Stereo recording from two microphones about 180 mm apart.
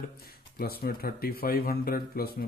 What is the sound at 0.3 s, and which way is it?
Speech, 60° left (ahead or behind).